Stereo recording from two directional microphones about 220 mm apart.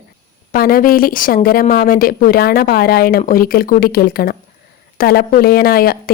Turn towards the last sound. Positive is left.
turn(degrees=45)  # may be behind; listen again after turning